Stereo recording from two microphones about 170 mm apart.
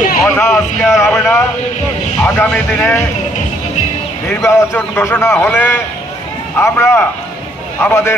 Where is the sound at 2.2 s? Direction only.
10° left (ahead or behind).